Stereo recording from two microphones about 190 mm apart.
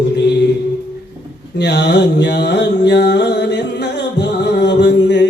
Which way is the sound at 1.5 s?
65° left (ahead or behind).